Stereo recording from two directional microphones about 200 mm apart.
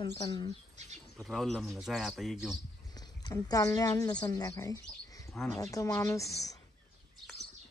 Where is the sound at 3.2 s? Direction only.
15° left (ahead or behind).